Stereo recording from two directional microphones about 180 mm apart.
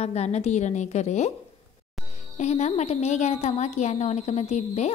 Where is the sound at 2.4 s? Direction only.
40° left (ahead or behind).